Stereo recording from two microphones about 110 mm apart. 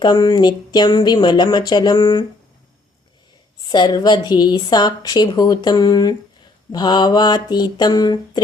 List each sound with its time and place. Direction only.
0.0 s a woman's voice: 40° left (ahead or behind)
3.7 s a woman's voice: 40° left (ahead or behind)